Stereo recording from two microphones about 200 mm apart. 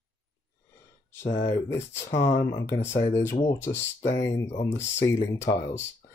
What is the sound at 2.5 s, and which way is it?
Speech, 10° left (ahead or behind).